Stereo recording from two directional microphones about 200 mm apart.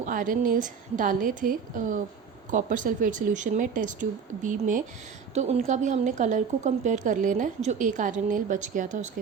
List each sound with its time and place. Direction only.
0.0 s a woman's voice: 40° right (ahead or behind)